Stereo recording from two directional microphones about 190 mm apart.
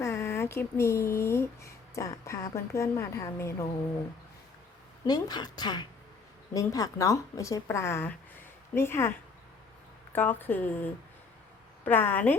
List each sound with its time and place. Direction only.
0.0 s speech: 15° left (ahead or behind)
5.0 s a woman's voice: 20° left (ahead or behind)